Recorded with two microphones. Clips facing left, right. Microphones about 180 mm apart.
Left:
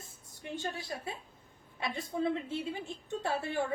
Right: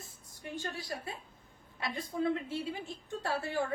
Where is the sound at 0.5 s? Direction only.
25° left (ahead or behind).